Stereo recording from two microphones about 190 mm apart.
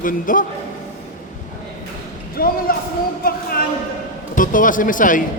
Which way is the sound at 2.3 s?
50° left (ahead or behind).